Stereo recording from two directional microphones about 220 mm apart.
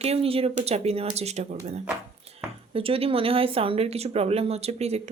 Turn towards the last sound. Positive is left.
turn(degrees=-30)  # may be behind; listen again after turning